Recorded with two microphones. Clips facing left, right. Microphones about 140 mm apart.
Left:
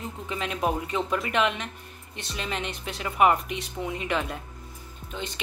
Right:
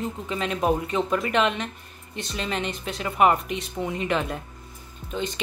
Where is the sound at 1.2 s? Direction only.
15° left (ahead or behind).